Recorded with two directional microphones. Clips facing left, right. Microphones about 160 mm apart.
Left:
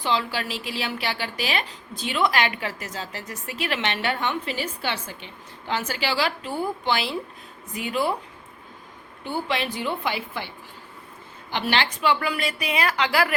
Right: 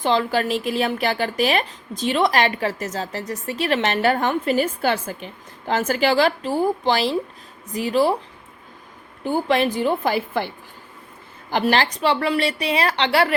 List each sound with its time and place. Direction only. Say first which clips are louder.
0.0 s a woman's voice: right 6 dB; 45° right (ahead or behind)
9.2 s a woman's voice: right 8 dB; 40° right (ahead or behind)
11.5 s a woman's voice: right 5 dB; 40° right (ahead or behind)